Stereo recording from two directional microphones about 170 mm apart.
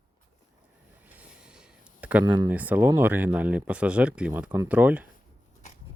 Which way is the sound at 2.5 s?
10° right (ahead or behind).